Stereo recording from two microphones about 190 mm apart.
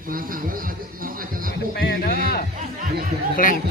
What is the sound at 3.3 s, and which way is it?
Speech, 45° left (ahead or behind).